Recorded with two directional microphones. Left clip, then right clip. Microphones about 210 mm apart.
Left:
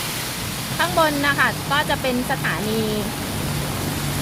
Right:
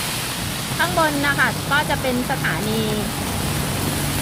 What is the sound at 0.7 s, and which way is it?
Speech, 15° left (ahead or behind).